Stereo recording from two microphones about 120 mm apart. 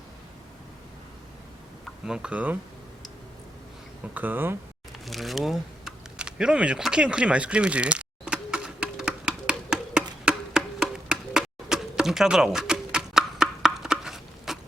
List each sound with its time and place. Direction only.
2.0 s speech: 5° right (ahead or behind)
4.1 s speech: 15° right (ahead or behind)
5.0 s a sound: centre (ahead or behind)